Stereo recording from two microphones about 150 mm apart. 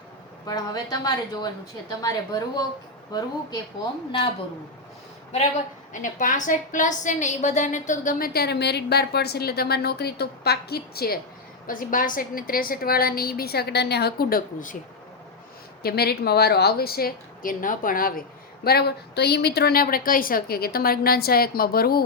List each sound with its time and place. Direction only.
0.4 s a woman's voice: 25° left (ahead or behind)
5.9 s a woman's voice: 60° left (ahead or behind); by 11.2 s 90° left
11.6 s a woman's voice: 65° left (ahead or behind)
15.8 s a woman's voice: 90° left; by 18.1 s 65° left (ahead or behind)
18.6 s a woman's voice: 90° left